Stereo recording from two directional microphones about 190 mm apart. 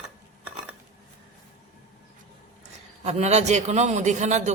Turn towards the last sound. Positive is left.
turn(degrees=-40)  # may be behind; listen again after turning